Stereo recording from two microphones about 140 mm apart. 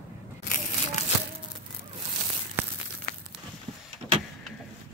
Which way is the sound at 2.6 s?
15° right (ahead or behind).